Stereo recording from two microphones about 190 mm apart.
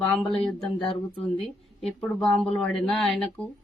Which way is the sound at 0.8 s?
30° left (ahead or behind).